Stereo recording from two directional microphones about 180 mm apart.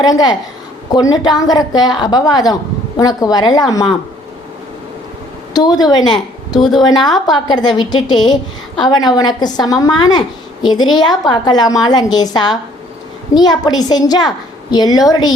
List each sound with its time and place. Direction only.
0.0 s a woman's voice: 20° left (ahead or behind)
5.5 s a woman's voice: 20° left (ahead or behind)